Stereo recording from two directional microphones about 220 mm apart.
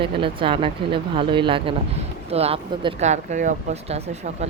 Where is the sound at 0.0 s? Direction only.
25° right (ahead or behind).